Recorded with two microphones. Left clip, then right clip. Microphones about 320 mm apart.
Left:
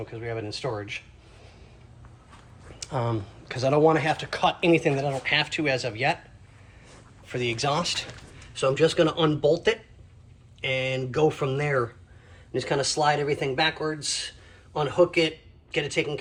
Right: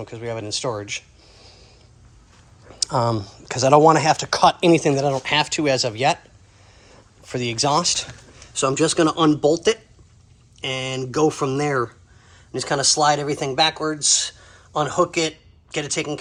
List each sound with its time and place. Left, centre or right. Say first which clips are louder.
0.0 s speech: right 4 dB; centre
2.8 s speech: right 8 dB; centre
7.3 s speech: right 5 dB; centre
15.7 s speech: right 1 dB; centre